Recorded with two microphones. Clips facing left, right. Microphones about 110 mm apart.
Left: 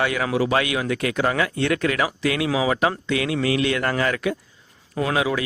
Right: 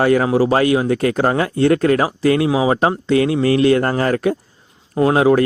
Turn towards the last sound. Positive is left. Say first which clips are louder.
# right 9 dB
turn(degrees=-40)  # may be behind; listen again after turning